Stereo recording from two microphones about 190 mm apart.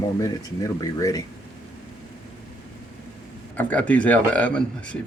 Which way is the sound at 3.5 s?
10° left (ahead or behind).